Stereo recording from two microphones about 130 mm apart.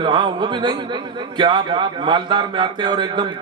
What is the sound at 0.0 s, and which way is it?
A man's voice, 40° right (ahead or behind).